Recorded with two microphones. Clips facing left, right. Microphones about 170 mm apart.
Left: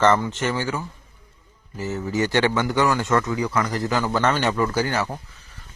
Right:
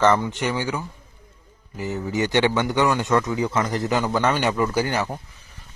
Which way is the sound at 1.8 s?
15° right (ahead or behind).